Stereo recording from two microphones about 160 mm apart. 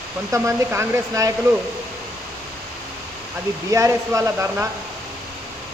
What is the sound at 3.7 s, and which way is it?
Speech, 20° right (ahead or behind).